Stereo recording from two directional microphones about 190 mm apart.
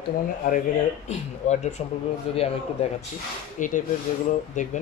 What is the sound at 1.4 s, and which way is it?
Speech, 35° left (ahead or behind).